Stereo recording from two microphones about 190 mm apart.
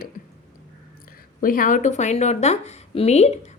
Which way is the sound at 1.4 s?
45° left (ahead or behind).